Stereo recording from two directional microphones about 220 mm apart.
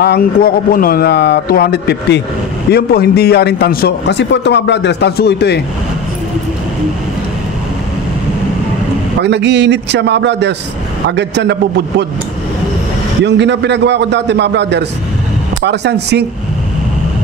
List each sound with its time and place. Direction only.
0.0 s a man's voice: 45° left (ahead or behind)
9.2 s a man's voice: 50° right (ahead or behind)
13.2 s a man's voice: 50° right (ahead or behind)